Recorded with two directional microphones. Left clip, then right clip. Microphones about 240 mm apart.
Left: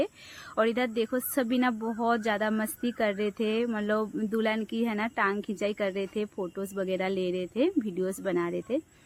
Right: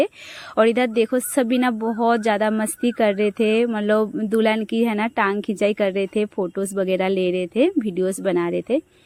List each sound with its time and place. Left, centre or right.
0.5 s speech: right